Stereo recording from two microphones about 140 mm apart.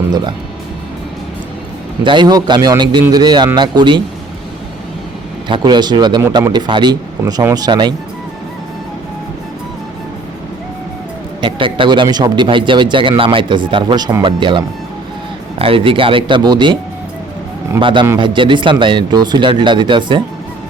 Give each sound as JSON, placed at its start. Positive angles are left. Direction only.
{"t": 2.0, "sound": "speech", "side_deg": -30}
{"t": 5.5, "sound": "speech", "side_deg": -30}
{"t": 11.3, "sound": "speech", "side_deg": -35}
{"t": 17.7, "sound": "speech", "side_deg": -35}